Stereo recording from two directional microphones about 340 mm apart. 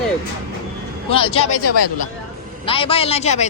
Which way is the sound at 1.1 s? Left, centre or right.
Centre.